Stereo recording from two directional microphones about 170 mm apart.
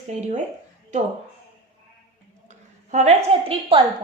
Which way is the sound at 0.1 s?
40° right (ahead or behind).